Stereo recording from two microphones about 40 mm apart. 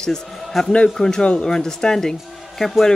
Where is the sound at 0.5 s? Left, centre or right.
Centre.